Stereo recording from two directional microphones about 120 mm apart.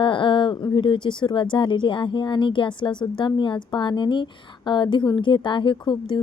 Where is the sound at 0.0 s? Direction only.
40° left (ahead or behind).